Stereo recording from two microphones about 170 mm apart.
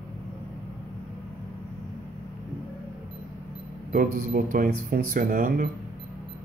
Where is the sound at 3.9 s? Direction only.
55° right (ahead or behind).